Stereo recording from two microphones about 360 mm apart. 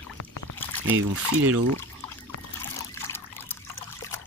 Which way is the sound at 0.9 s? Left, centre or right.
Right.